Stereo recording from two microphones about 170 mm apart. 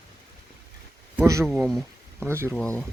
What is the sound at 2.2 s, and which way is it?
Speech, 15° right (ahead or behind).